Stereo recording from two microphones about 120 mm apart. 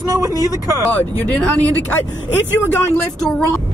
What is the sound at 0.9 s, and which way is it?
Speech, 10° left (ahead or behind).